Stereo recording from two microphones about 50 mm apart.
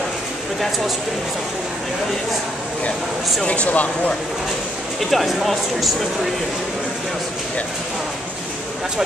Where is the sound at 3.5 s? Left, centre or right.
Left.